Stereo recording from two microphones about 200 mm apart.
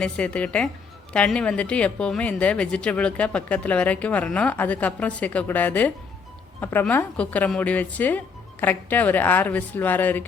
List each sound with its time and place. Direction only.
0.0 s a woman's voice: 5° left (ahead or behind)